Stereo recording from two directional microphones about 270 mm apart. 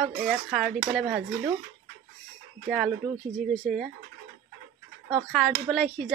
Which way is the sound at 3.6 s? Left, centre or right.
Right.